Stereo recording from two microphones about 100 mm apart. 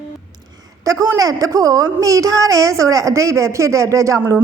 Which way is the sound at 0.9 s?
35° right (ahead or behind).